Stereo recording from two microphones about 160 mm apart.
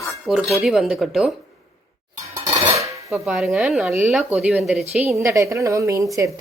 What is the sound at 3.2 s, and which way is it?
A woman's voice, 5° right (ahead or behind).